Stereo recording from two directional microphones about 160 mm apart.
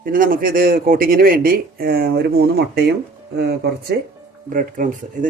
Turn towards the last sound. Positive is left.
turn(degrees=-55)  # may be behind; listen again after turning